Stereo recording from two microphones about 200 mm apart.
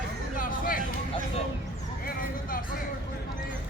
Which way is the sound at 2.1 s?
45° left (ahead or behind).